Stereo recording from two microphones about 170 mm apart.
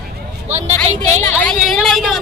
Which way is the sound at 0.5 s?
40° right (ahead or behind).